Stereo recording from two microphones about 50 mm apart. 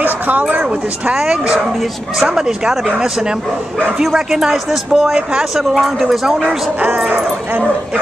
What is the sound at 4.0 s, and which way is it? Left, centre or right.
A woman's voice, centre.